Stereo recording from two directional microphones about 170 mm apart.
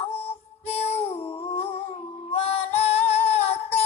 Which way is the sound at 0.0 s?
35° left (ahead or behind).